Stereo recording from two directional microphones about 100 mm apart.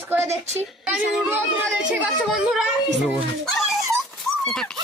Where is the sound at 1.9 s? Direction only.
5° right (ahead or behind).